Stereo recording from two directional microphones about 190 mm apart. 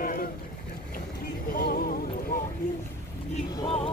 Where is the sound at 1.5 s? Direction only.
50° left (ahead or behind).